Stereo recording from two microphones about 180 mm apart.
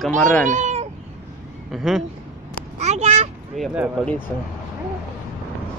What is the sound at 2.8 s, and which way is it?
Speech, 35° right (ahead or behind).